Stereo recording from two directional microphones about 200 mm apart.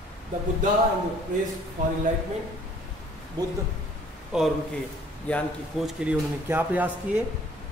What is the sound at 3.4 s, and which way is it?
Speech, 20° right (ahead or behind).